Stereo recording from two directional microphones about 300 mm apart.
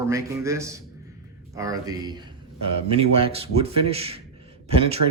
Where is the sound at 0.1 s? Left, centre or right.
Centre.